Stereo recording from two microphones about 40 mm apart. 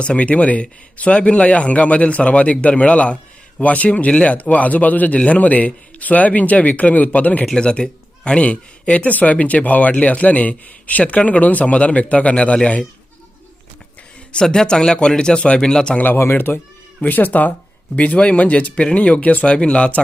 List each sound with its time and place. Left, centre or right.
0.0 s speech: left
7.5 s speech: left
14.3 s speech: centre
16.1 s speech: left
17.0 s speech: left
18.8 s speech: left
19.5 s speech: left